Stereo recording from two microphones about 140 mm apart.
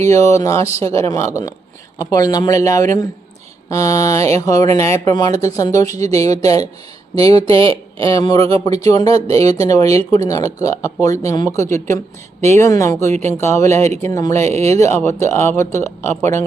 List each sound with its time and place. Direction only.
0.0 s speech: 20° left (ahead or behind)
5.9 s speech: 50° right (ahead or behind)
6.1 s speech: 25° left (ahead or behind)
14.4 s speech: 50° right (ahead or behind)
14.9 s speech: 20° left (ahead or behind)